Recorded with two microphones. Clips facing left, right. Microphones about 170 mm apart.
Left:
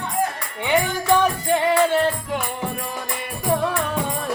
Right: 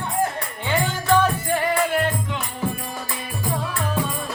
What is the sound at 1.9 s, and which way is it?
Music, 30° left (ahead or behind).